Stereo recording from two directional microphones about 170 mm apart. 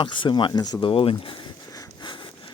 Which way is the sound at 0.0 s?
30° left (ahead or behind).